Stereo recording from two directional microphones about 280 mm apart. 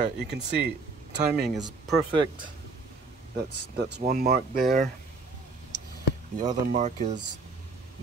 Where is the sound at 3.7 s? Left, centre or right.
Right.